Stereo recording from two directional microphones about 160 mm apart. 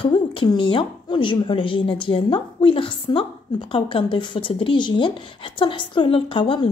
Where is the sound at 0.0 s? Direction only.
30° left (ahead or behind).